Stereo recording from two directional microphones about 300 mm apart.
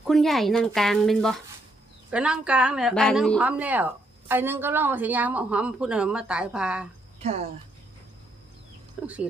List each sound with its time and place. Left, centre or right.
0.0 s a woman's voice: centre
7.2 s speech: right
9.0 s a woman's voice: centre